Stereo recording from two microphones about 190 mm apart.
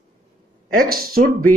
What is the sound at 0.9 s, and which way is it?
Speech, 50° right (ahead or behind).